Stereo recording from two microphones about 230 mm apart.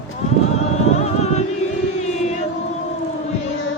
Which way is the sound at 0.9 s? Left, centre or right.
Left.